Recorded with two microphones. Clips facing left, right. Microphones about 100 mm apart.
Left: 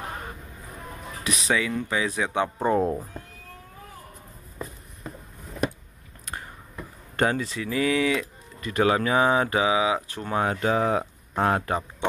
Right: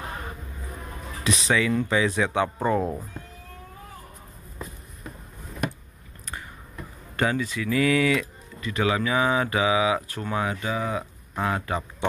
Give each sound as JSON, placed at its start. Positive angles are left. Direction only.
{"t": 1.5, "sound": "speech", "side_deg": 5}
{"t": 2.3, "sound": "speech", "side_deg": 20}
{"t": 7.2, "sound": "speech", "side_deg": 45}
{"t": 7.5, "sound": "speech", "side_deg": 25}
{"t": 8.6, "sound": "speech", "side_deg": 40}
{"t": 10.3, "sound": "speech", "side_deg": 50}